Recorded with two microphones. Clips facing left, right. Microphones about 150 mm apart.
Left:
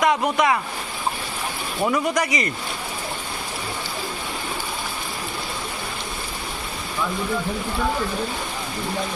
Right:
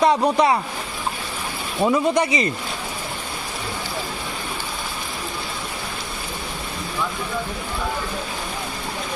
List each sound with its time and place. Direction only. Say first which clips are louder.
0.0 s speech: right 3 dB; 30° right (ahead or behind)
1.8 s speech: right 3 dB; 25° right (ahead or behind)